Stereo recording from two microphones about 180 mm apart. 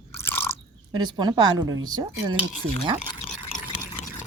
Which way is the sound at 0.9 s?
25° right (ahead or behind).